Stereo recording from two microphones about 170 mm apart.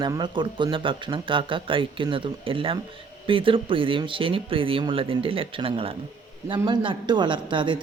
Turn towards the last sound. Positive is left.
turn(degrees=-30)  # may be behind; listen again after turning